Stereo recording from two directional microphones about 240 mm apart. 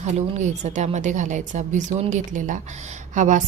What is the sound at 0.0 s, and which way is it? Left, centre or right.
A woman's voice, right.